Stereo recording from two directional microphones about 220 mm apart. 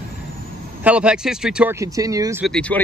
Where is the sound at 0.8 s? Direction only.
5° right (ahead or behind).